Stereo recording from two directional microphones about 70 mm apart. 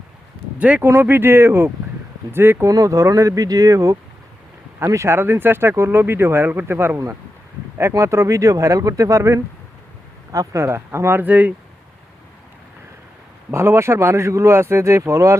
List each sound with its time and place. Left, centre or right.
0.6 s speech: right
0.9 s speech: right
2.6 s speech: right
5.1 s speech: right
11.3 s speech: right
13.5 s speech: right